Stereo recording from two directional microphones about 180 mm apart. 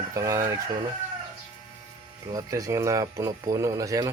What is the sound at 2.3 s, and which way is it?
Speech, 20° right (ahead or behind).